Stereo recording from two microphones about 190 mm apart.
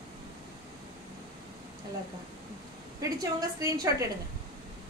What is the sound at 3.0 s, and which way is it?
A woman's voice, 20° right (ahead or behind).